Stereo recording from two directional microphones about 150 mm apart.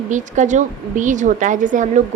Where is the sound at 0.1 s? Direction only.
55° right (ahead or behind).